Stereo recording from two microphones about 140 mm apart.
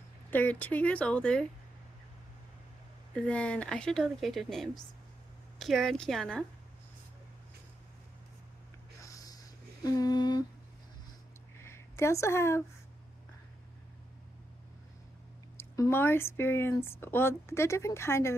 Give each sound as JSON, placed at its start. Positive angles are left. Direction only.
{"t": 0.3, "sound": "speech", "side_deg": 10}
{"t": 3.2, "sound": "speech", "side_deg": 10}
{"t": 9.0, "sound": "snort", "side_deg": 25}
{"t": 9.8, "sound": "humming", "side_deg": 25}
{"t": 11.6, "sound": "a woman's voice", "side_deg": 20}
{"t": 15.5, "sound": "speech", "side_deg": 20}